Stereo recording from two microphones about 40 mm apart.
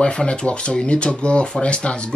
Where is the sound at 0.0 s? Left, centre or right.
Left.